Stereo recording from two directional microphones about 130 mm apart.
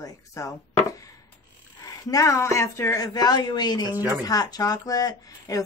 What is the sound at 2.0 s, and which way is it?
A woman's voice, 25° left (ahead or behind).